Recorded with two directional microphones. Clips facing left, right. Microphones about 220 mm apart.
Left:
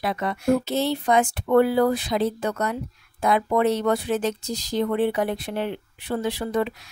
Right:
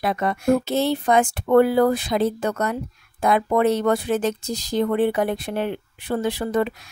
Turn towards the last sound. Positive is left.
turn(degrees=-50)  # may be behind; listen again after turning